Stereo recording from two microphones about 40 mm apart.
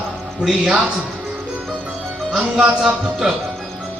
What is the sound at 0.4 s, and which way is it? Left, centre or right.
Speech, centre.